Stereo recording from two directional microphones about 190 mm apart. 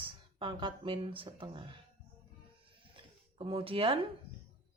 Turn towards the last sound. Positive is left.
turn(degrees=-30)  # may be behind; listen again after turning